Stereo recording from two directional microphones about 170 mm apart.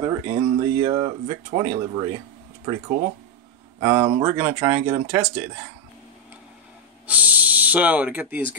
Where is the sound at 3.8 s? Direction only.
20° right (ahead or behind).